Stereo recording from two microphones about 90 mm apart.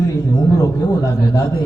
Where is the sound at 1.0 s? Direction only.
40° left (ahead or behind).